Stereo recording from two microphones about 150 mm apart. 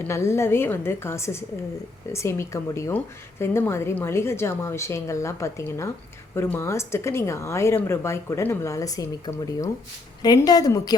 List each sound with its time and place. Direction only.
0.0 s a woman's voice: 20° left (ahead or behind)